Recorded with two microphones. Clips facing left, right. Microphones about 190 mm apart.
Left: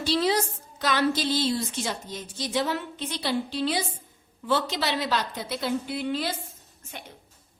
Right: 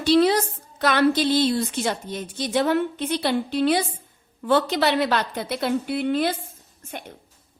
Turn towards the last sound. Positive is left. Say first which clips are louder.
# right 6 dB
turn(degrees=-55)  # may be behind; listen again after turning